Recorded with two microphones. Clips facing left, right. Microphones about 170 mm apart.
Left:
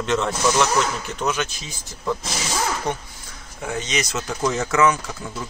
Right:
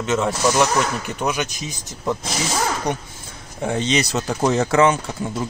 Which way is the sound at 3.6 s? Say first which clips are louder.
Right 5 dB; 30° right (ahead or behind).